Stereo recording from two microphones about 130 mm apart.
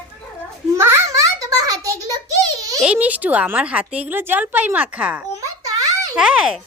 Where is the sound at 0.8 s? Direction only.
20° right (ahead or behind).